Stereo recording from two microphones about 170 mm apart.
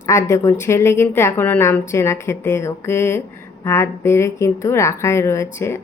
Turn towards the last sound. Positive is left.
turn(degrees=15)  # may be behind; listen again after turning